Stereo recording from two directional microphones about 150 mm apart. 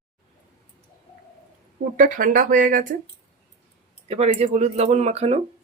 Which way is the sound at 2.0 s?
60° right (ahead or behind).